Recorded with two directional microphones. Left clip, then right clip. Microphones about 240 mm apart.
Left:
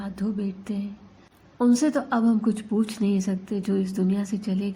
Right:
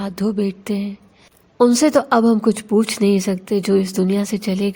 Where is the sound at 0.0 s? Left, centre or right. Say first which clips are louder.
Right 10 dB; right.